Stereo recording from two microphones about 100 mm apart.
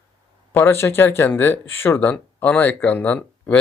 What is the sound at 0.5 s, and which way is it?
Speech, 25° left (ahead or behind).